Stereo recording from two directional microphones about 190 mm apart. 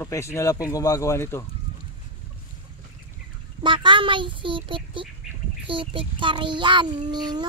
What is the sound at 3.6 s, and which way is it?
Speech, 25° right (ahead or behind).